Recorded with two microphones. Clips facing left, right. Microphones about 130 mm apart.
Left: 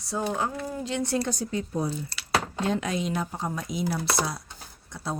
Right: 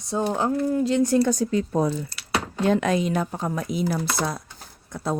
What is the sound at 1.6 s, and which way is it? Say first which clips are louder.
Speech: right 6 dB; 90° right.